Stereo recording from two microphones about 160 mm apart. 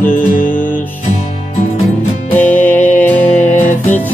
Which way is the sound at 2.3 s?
10° left (ahead or behind).